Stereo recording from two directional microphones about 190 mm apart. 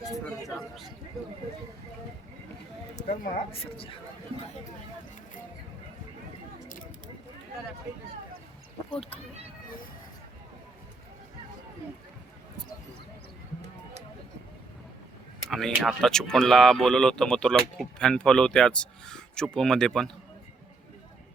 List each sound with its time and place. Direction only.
2.9 s speech: 35° left (ahead or behind)
8.9 s speech: 30° left (ahead or behind)
15.4 s speech: centre (ahead or behind)